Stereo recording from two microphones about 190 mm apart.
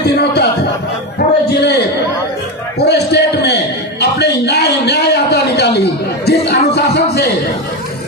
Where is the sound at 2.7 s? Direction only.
60° left (ahead or behind).